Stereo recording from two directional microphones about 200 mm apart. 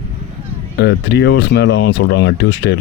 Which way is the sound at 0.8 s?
55° left (ahead or behind).